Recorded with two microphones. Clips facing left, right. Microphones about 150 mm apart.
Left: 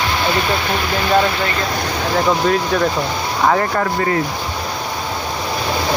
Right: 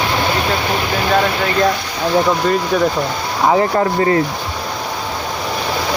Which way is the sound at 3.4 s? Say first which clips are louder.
Right 3 dB; 15° right (ahead or behind).